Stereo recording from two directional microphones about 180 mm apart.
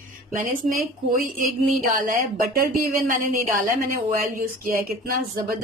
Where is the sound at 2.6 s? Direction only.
50° right (ahead or behind).